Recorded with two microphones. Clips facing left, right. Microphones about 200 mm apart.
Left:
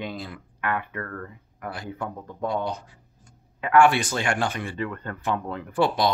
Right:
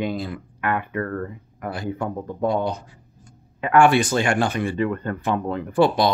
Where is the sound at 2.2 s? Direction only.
35° right (ahead or behind).